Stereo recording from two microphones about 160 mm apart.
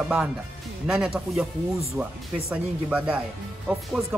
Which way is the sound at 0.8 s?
5° right (ahead or behind).